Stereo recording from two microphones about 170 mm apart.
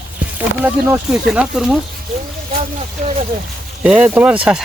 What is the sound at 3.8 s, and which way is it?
Speech, 5° right (ahead or behind).